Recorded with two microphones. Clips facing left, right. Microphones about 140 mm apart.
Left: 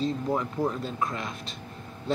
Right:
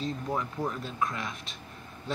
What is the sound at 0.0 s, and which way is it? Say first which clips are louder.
Speech: left 5 dB; 20° left (ahead or behind).